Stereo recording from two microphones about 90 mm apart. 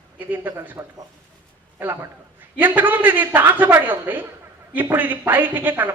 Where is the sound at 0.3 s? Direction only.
20° right (ahead or behind).